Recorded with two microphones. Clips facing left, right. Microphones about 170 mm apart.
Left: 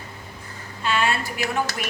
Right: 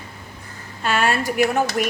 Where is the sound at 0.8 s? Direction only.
50° right (ahead or behind).